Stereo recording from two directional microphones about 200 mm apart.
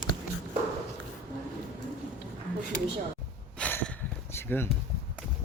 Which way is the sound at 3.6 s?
5° left (ahead or behind).